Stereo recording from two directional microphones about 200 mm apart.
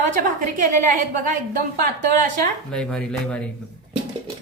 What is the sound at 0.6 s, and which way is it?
A woman's voice, 40° right (ahead or behind).